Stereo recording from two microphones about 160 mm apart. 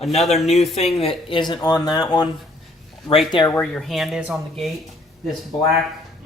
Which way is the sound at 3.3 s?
30° left (ahead or behind).